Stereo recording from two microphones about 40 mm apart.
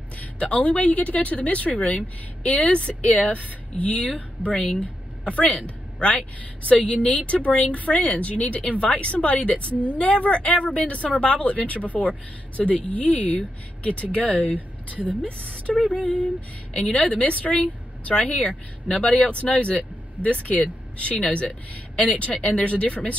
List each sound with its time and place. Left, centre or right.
0.2 s speech: left
4.4 s speech: right
4.7 s a woman's voice: left
9.7 s a woman's voice: right
9.9 s speech: left
16.9 s speech: left